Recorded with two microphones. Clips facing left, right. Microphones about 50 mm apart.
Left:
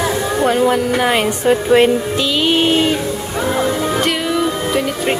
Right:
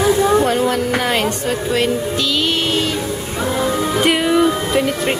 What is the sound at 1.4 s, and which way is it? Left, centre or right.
Speech, left.